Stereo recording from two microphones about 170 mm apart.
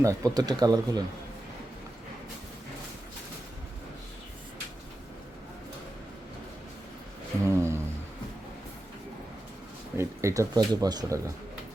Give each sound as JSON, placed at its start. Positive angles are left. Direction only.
{"t": 0.0, "sound": "speech", "side_deg": -20}
{"t": 7.4, "sound": "a sound", "side_deg": -15}
{"t": 10.0, "sound": "speech", "side_deg": -15}